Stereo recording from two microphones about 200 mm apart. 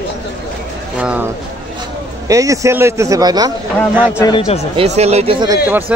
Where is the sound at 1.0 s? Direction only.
5° right (ahead or behind).